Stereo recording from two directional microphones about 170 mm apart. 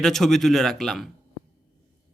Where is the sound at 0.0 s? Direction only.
Centre (ahead or behind).